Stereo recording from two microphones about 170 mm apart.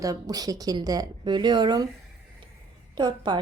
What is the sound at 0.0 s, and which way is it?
Speech, 20° right (ahead or behind).